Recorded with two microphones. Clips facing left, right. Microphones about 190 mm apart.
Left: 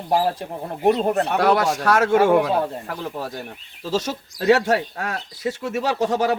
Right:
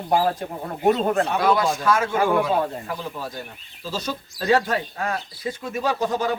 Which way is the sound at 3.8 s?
75° left (ahead or behind).